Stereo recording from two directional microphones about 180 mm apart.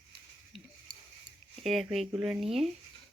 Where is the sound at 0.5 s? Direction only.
Centre (ahead or behind).